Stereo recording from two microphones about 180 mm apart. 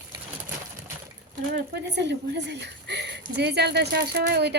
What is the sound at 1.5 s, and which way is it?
A woman's voice, 70° right (ahead or behind).